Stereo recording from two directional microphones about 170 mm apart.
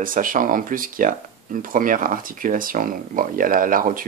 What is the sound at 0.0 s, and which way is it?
Speech, 55° right (ahead or behind).